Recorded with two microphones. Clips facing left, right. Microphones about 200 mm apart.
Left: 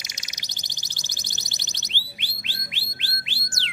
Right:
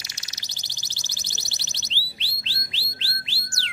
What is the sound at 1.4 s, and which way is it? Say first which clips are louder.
Music: left 1 dB; 15° left (ahead or behind).